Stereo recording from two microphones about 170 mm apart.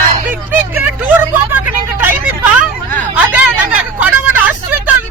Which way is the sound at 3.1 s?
10° right (ahead or behind).